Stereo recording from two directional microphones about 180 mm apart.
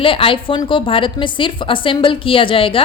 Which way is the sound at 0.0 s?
30° left (ahead or behind).